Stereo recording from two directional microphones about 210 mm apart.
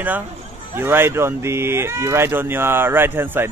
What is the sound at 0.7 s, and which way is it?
Speech, 10° right (ahead or behind).